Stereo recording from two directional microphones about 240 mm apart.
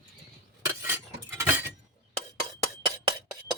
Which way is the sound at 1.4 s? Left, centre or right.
Centre.